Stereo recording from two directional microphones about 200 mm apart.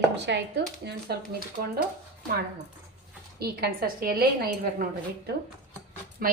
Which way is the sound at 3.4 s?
50° right (ahead or behind).